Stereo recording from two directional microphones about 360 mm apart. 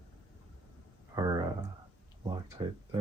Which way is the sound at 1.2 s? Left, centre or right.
Centre.